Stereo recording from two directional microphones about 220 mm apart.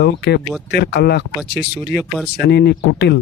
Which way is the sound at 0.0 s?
50° left (ahead or behind).